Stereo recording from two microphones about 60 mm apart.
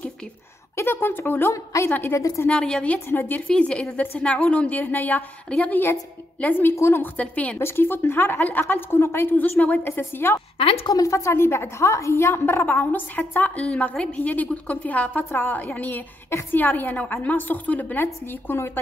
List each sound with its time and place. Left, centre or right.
0.7 s a woman's voice: left
1.5 s a woman's voice: left
2.5 s a woman's voice: centre
3.1 s a woman's voice: left
3.4 s a woman's voice: centre; by 6.7 s left
6.7 s a woman's voice: left
7.2 s a woman's voice: left
7.5 s a woman's voice: left
9.4 s a woman's voice: left
10.9 s a woman's voice: left
12.6 s a woman's voice: left